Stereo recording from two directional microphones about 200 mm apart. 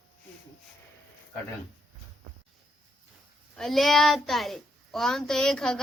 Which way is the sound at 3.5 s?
Centre (ahead or behind).